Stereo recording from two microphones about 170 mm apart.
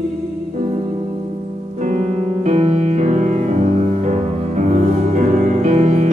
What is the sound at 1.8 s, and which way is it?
Music, 45° right (ahead or behind).